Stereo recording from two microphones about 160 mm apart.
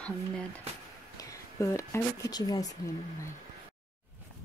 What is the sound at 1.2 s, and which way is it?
Speech, 20° left (ahead or behind).